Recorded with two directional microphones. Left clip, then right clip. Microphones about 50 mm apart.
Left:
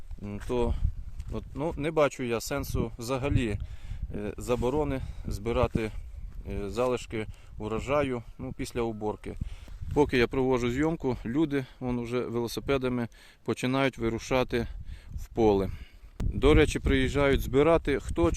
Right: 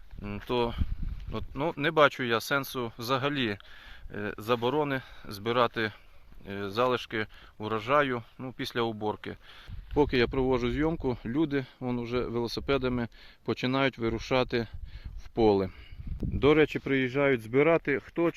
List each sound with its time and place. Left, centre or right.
0.5 s speech: centre
9.9 s speech: left; by 16.8 s centre
16.8 s speech: left
18.1 s speech: left